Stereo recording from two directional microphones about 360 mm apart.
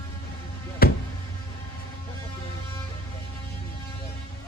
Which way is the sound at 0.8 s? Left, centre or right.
Left.